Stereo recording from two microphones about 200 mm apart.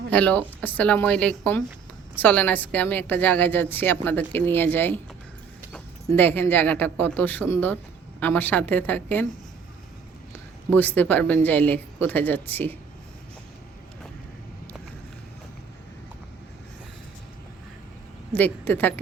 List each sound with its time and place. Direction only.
0.1 s a woman's voice: 5° left (ahead or behind)
6.1 s a woman's voice: 10° left (ahead or behind)
10.7 s a woman's voice: 10° left (ahead or behind)
18.3 s a woman's voice: 10° left (ahead or behind)